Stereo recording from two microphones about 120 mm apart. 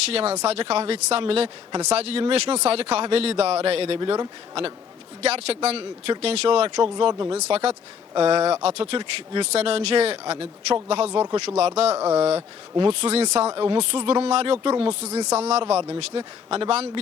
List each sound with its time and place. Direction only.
0.1 s speech: 55° right (ahead or behind)
6.9 s speech: 35° right (ahead or behind)
7.3 s speech: 60° right (ahead or behind)
11.9 s speech: 20° right (ahead or behind)
12.4 s speech: 40° right (ahead or behind)
12.9 s speech: 55° right (ahead or behind)
15.0 s speech: 25° right (ahead or behind)
15.3 s speech: 65° right (ahead or behind)
16.0 s speech: 50° right (ahead or behind)